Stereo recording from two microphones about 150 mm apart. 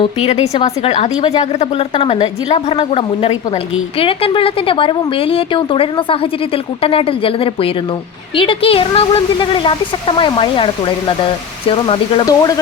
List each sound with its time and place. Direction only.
0.0 s a woman's voice: 45° left (ahead or behind)
12.2 s speech: 25° left (ahead or behind)